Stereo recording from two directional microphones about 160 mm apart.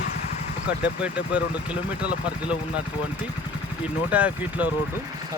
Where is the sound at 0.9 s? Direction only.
5° right (ahead or behind).